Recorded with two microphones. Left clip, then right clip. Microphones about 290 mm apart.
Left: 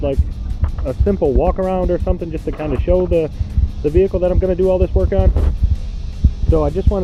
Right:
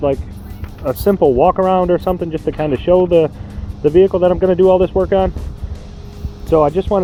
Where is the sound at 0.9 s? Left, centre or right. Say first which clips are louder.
Right 5 dB; right.